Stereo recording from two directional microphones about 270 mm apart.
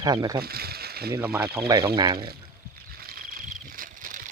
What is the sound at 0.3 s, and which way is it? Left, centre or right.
Speech, right.